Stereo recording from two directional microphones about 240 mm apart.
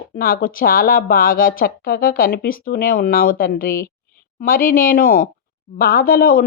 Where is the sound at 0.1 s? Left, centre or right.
Left.